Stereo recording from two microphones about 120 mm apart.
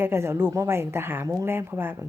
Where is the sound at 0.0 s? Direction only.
20° right (ahead or behind).